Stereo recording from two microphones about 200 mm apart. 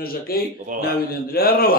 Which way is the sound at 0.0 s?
50° left (ahead or behind).